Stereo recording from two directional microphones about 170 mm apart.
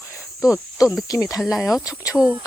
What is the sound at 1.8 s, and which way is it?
Speech, 20° left (ahead or behind).